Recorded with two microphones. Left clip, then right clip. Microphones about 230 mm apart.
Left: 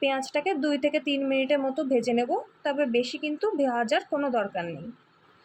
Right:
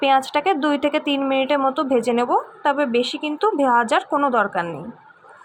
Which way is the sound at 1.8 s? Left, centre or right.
Right.